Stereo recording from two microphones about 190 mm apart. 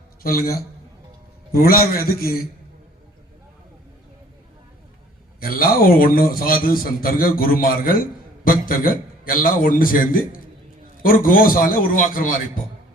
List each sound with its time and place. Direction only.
0.2 s a man's voice: 50° left (ahead or behind)
5.4 s a man's voice: 50° left (ahead or behind)